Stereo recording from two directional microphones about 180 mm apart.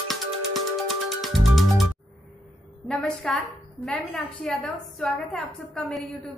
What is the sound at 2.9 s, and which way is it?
A woman's voice, centre (ahead or behind).